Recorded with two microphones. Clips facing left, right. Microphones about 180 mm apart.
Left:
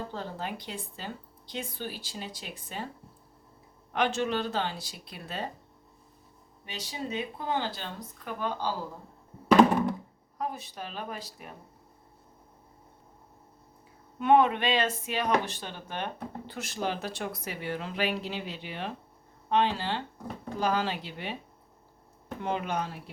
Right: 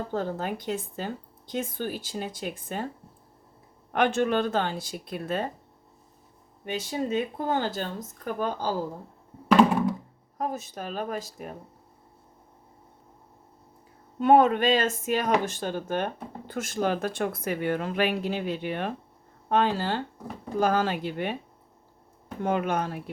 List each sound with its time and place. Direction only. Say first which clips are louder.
0.1 s speech: right 7 dB; 50° right (ahead or behind)
3.9 s speech: right 5 dB; 55° right (ahead or behind)
6.7 s speech: right 8 dB; 50° right (ahead or behind)
10.3 s speech: right 4 dB; 45° right (ahead or behind)
14.2 s speech: right 4 dB; 40° right (ahead or behind)
22.4 s speech: right 5 dB; 50° right (ahead or behind)